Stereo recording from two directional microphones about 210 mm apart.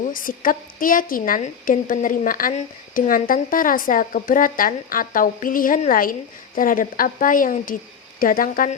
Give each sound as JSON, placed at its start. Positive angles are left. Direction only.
{"t": 0.1, "sound": "a woman's voice", "side_deg": 40}